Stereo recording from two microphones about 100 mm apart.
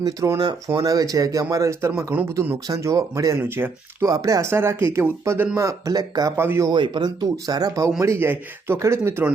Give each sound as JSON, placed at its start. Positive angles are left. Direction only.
{"t": 0.0, "sound": "speech", "side_deg": -35}
{"t": 2.3, "sound": "speech", "side_deg": -20}
{"t": 4.0, "sound": "speech", "side_deg": -35}
{"t": 6.3, "sound": "speech", "side_deg": -25}
{"t": 6.7, "sound": "speech", "side_deg": -50}
{"t": 8.0, "sound": "speech", "side_deg": -25}